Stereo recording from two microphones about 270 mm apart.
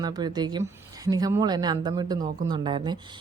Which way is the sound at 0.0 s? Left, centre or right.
Centre.